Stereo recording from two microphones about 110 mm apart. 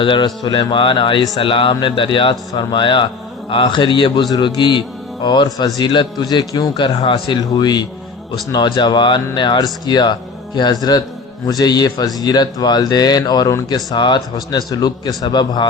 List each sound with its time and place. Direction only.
0.0 s speech: 50° left (ahead or behind)